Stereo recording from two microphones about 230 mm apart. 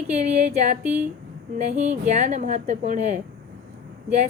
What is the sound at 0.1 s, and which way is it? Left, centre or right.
Speech, right.